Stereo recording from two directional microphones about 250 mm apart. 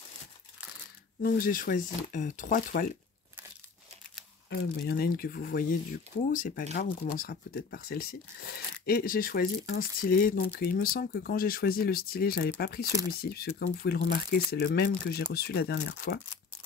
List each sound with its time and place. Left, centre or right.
1.2 s speech: left
4.5 s speech: left